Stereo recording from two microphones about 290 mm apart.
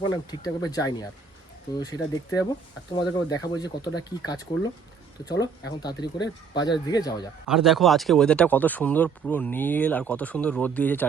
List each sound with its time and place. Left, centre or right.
0.0 s speech: centre
7.4 s speech: centre